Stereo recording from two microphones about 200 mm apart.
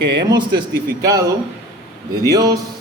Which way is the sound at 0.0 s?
60° right (ahead or behind).